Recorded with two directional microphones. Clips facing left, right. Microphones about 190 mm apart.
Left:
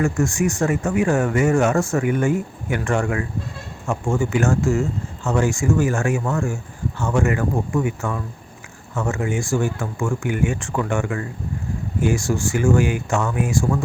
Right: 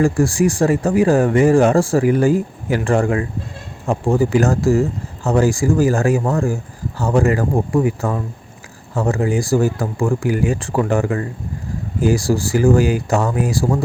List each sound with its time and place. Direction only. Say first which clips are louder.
0.0 s speech: right 5 dB; 35° right (ahead or behind)